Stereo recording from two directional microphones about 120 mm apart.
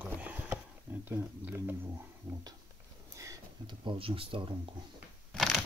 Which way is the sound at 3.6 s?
45° right (ahead or behind).